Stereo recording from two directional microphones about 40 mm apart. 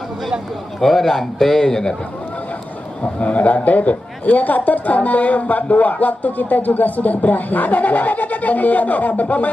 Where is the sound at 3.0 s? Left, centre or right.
Left.